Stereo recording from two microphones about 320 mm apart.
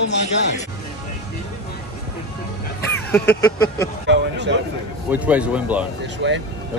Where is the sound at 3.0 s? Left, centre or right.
Centre.